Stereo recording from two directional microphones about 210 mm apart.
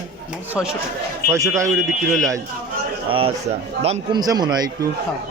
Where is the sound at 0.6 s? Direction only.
Centre (ahead or behind).